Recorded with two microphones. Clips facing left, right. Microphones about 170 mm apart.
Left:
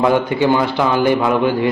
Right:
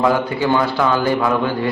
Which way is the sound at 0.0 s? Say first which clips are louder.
Left 3 dB; 20° left (ahead or behind).